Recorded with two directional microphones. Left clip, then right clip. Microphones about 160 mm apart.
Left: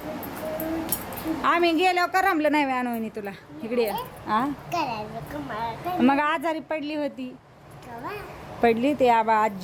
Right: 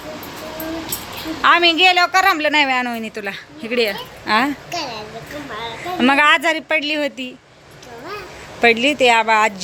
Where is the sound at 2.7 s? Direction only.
5° left (ahead or behind).